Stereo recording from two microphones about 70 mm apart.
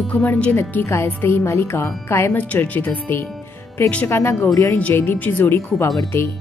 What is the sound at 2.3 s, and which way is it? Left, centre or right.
Speech, left.